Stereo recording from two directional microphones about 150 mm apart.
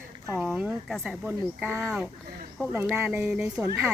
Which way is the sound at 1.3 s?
10° right (ahead or behind).